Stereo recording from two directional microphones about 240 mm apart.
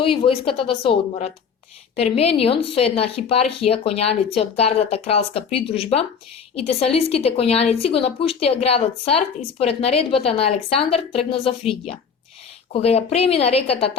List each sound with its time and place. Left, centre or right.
0.0 s speech: left